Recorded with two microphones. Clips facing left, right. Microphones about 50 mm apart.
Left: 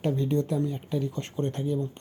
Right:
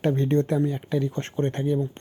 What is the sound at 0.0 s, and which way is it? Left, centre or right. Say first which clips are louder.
Speech: right 4 dB; right.